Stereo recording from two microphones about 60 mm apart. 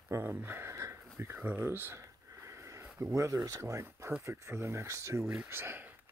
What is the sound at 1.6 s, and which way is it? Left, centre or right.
Speech, right.